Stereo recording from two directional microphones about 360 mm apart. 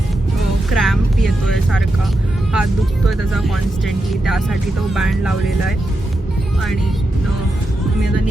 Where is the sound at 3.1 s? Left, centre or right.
Centre.